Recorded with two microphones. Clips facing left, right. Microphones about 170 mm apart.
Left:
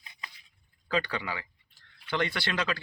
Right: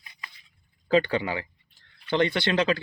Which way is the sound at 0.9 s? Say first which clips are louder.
Right 8 dB; 25° right (ahead or behind).